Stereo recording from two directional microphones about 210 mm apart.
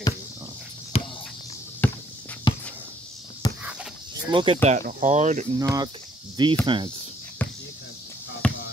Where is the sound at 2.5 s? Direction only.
20° left (ahead or behind).